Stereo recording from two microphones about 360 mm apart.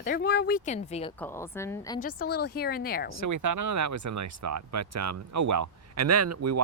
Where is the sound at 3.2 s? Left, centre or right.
Right.